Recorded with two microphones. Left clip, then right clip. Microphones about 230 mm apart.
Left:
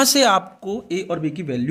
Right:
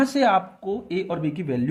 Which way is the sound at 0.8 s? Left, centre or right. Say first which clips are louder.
Left 4 dB; left.